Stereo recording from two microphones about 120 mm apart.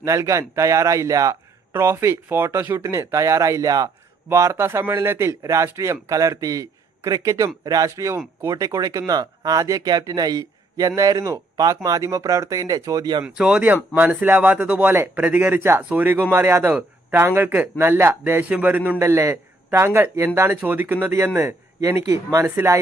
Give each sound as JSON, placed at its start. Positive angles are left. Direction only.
{"t": 0.0, "sound": "speech", "side_deg": -25}
{"t": 13.2, "sound": "speech", "side_deg": -5}